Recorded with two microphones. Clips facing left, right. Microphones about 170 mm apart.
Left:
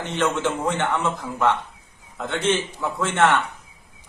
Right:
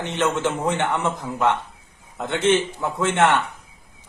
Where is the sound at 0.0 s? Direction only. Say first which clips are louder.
Right 1 dB; 20° right (ahead or behind).